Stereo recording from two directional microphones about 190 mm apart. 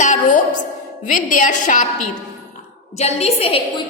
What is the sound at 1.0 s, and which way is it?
Speech, 45° left (ahead or behind).